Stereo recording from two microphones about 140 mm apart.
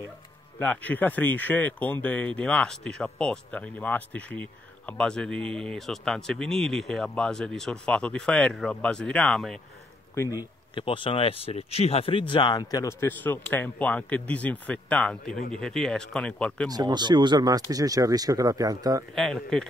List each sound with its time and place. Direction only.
0.6 s speech: 10° left (ahead or behind)
10.1 s speech: 20° left (ahead or behind)
10.7 s speech: 35° left (ahead or behind)
12.8 s a man's voice: 15° left (ahead or behind)
16.7 s speech: 30° right (ahead or behind)
19.1 s speech: centre (ahead or behind)